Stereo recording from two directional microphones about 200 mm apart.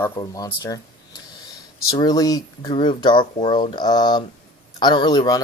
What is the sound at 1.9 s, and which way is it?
Speech, 20° left (ahead or behind).